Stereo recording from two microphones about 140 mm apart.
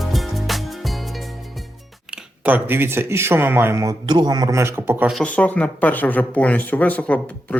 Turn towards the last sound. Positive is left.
turn(degrees=10)  # may be behind; listen again after turning